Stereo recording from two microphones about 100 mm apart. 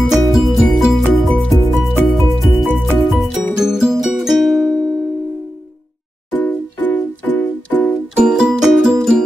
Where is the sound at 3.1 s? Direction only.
5° right (ahead or behind).